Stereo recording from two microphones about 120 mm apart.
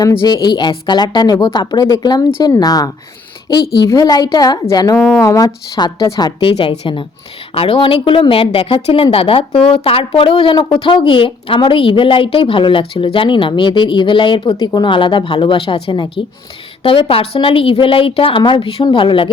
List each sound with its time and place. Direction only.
0.2 s a woman's voice: 40° left (ahead or behind)
4.9 s a woman's voice: 5° left (ahead or behind)
5.2 s a woman's voice: 25° left (ahead or behind); by 19.3 s 45° left (ahead or behind)